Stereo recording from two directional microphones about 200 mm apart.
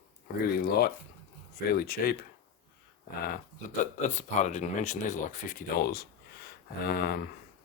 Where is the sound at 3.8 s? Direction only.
35° left (ahead or behind); by 7.2 s 55° left (ahead or behind).